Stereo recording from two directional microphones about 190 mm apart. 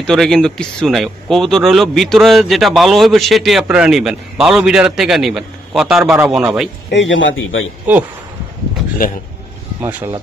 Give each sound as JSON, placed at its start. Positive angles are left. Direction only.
{"t": 0.0, "sound": "speech", "side_deg": 0}
{"t": 6.9, "sound": "a man's voice", "side_deg": 75}
{"t": 9.8, "sound": "speech", "side_deg": -10}